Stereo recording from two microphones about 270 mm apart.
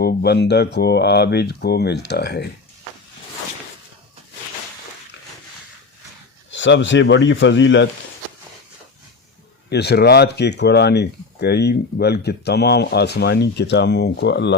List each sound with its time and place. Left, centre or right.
0.0 s speech: left
6.5 s speech: left
9.6 s speech: left